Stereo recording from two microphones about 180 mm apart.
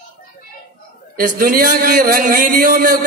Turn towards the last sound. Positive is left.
turn(degrees=-50)  # may be behind; listen again after turning